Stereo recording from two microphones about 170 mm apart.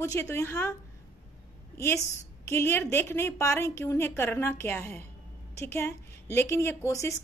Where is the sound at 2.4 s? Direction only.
15° left (ahead or behind).